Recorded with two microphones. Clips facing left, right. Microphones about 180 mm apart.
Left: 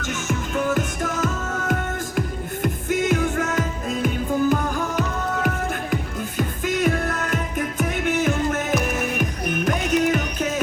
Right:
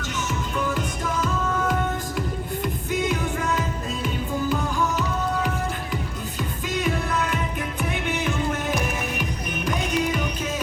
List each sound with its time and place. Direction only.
0.0 s music: 50° left (ahead or behind)